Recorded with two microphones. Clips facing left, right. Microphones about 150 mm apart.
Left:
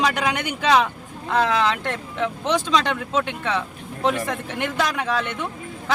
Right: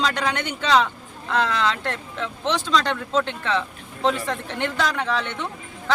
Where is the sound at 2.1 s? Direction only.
15° left (ahead or behind).